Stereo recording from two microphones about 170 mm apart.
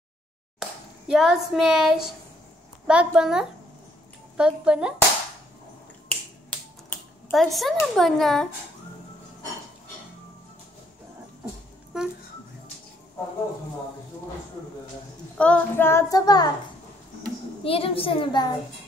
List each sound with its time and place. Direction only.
0.6 s a child's voice: centre (ahead or behind)
6.9 s a sound: 5° left (ahead or behind)
7.8 s speech: centre (ahead or behind)
15.3 s child singing: 5° left (ahead or behind); by 16.4 s 20° left (ahead or behind)
17.6 s a child's voice: 35° left (ahead or behind)